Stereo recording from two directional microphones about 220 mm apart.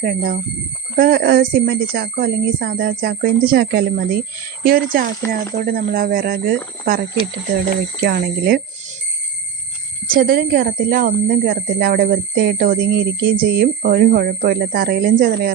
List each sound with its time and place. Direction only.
0.0 s speech: 45° right (ahead or behind)
8.0 s speech: 45° right (ahead or behind)
10.1 s speech: 40° right (ahead or behind)